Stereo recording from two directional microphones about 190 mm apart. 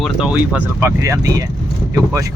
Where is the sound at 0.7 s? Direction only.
15° right (ahead or behind).